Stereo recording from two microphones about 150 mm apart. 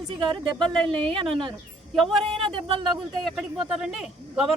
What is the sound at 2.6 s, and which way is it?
Speech, 35° right (ahead or behind).